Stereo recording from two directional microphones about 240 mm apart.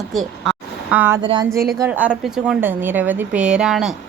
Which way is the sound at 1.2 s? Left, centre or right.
Centre.